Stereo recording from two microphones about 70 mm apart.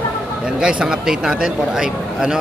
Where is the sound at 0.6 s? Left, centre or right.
Centre.